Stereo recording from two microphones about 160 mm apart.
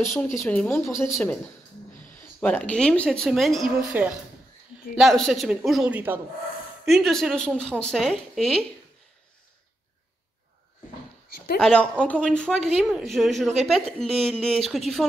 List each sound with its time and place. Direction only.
0.0 s speech: centre (ahead or behind)
6.9 s speech: centre (ahead or behind)
11.2 s a sound: 70° left (ahead or behind)
11.6 s speech: 5° left (ahead or behind)